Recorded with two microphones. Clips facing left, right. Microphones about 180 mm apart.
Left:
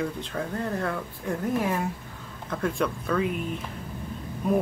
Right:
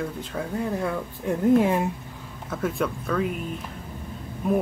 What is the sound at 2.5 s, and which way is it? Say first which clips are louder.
Speech: right 1 dB; 5° right (ahead or behind).